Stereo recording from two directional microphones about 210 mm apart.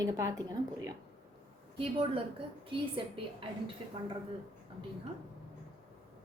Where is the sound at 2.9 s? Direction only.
25° right (ahead or behind).